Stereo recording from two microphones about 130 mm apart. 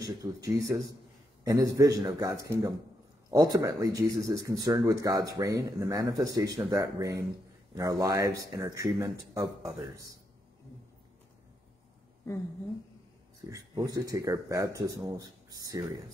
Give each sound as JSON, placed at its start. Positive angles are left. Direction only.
{"t": 0.0, "sound": "speech", "side_deg": -25}
{"t": 13.5, "sound": "speech", "side_deg": -25}